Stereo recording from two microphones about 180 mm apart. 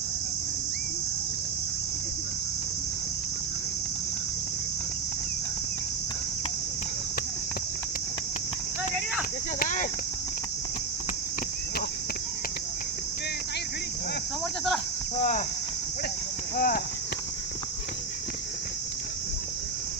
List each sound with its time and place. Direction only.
9.6 s speech: 45° left (ahead or behind)
15.2 s speech: 45° left (ahead or behind)
16.6 s speech: 55° left (ahead or behind)